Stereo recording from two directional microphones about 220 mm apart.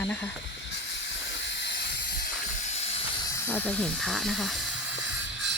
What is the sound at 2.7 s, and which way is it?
Steam, 30° left (ahead or behind).